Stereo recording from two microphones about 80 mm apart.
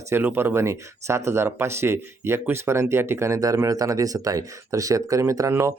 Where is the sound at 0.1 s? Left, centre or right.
Right.